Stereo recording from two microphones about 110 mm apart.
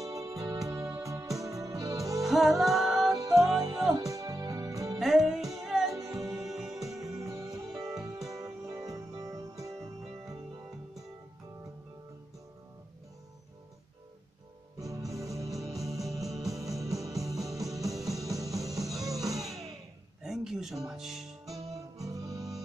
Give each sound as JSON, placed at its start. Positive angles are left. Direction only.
{"t": 0.0, "sound": "music", "side_deg": -30}
{"t": 2.2, "sound": "music", "side_deg": 0}
{"t": 3.2, "sound": "music", "side_deg": -30}
{"t": 4.9, "sound": "music", "side_deg": 0}
{"t": 7.2, "sound": "music", "side_deg": -30}
{"t": 7.7, "sound": "music", "side_deg": -5}
{"t": 8.0, "sound": "music", "side_deg": -30}
{"t": 14.8, "sound": "music", "side_deg": -30}
{"t": 19.3, "sound": "music", "side_deg": 0}
{"t": 21.5, "sound": "music", "side_deg": -30}